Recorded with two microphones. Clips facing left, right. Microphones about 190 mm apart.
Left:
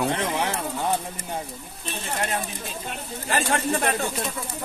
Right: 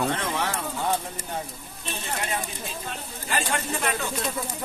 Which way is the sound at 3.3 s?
40° left (ahead or behind).